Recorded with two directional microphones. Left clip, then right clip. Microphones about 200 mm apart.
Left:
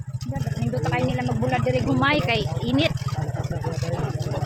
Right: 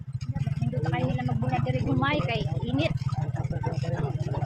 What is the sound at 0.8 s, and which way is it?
Speech, 55° left (ahead or behind).